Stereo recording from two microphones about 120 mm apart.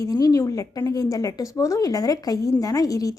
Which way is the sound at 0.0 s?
30° left (ahead or behind).